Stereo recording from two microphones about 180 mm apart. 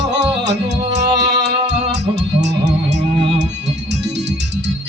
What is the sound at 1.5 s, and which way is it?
Music, 75° right (ahead or behind).